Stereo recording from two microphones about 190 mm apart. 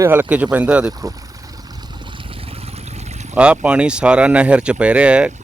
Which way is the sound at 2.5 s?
35° right (ahead or behind).